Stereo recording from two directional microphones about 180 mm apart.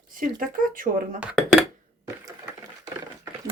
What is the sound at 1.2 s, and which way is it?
Speech, 5° right (ahead or behind).